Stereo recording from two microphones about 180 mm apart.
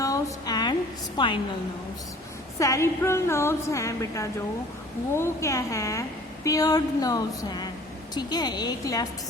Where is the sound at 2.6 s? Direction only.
15° left (ahead or behind).